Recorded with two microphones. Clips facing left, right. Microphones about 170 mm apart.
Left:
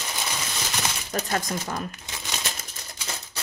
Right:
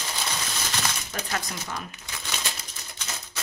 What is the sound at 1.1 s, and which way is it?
Speech, 45° left (ahead or behind).